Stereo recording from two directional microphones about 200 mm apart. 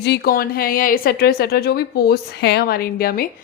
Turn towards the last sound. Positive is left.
turn(degrees=50)  # may be behind; listen again after turning